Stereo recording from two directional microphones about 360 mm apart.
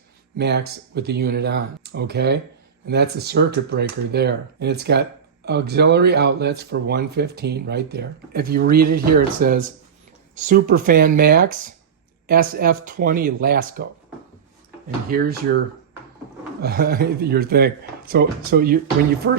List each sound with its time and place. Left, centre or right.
0.3 s speech: right
15.1 s speech: right